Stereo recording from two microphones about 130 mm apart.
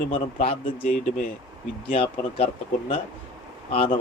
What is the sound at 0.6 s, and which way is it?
Speech, 90° left.